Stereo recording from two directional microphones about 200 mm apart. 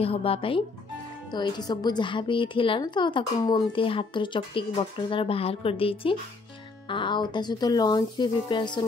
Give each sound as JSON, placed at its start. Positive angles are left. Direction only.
{"t": 0.0, "sound": "a woman's voice", "side_deg": 30}